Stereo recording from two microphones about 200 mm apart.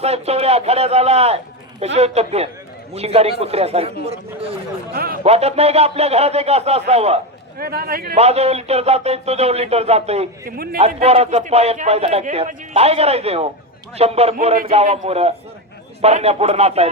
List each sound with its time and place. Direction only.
0.0 s a man's voice: 30° right (ahead or behind)
7.6 s a man's voice: 50° right (ahead or behind)
8.1 s a man's voice: 30° right (ahead or behind)
10.4 s a man's voice: 50° right (ahead or behind)
10.8 s a man's voice: 30° right (ahead or behind)